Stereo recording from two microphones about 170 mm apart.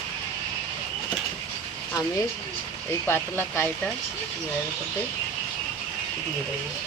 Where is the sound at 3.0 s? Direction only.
15° left (ahead or behind).